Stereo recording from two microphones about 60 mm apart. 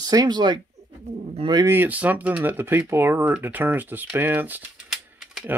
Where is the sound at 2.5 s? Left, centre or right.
Right.